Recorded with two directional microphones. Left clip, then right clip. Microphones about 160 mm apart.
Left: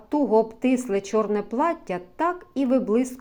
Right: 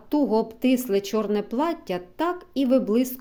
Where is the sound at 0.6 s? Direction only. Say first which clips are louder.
Right 1 dB; 45° right (ahead or behind).